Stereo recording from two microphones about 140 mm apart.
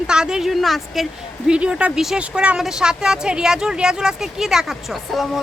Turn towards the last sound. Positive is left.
turn(degrees=0)  # may be behind; listen again after turning